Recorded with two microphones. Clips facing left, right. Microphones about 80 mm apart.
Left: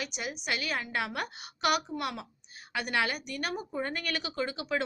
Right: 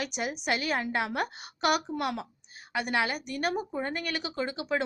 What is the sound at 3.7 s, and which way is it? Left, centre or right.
Speech, right.